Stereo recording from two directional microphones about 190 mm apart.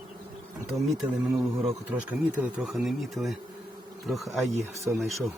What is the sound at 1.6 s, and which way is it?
Speech, 5° right (ahead or behind).